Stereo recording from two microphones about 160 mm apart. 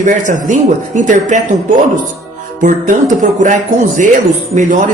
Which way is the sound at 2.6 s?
55° right (ahead or behind).